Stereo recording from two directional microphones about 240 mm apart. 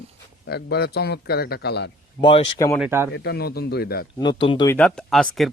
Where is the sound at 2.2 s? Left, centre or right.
Centre.